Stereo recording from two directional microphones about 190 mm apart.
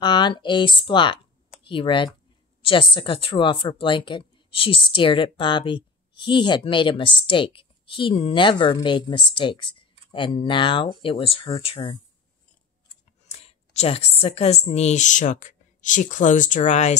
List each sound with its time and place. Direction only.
0.0 s a woman's voice: 25° left (ahead or behind)
13.3 s a woman's voice: 35° left (ahead or behind)